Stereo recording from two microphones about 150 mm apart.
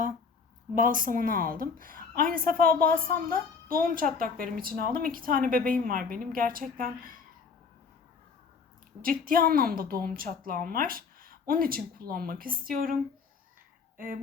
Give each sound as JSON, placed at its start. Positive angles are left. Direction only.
{"t": 0.7, "sound": "a woman's voice", "side_deg": -60}
{"t": 9.0, "sound": "a woman's voice", "side_deg": -70}